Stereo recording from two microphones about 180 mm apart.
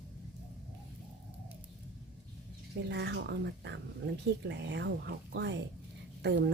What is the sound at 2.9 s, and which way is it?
Speech, 70° right (ahead or behind).